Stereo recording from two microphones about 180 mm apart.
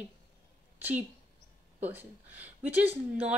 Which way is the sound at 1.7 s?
10° right (ahead or behind).